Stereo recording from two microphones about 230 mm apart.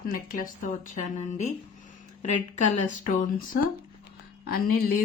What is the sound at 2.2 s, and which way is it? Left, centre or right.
Speech, left.